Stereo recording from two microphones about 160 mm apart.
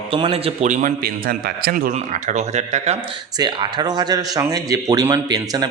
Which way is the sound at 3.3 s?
25° right (ahead or behind).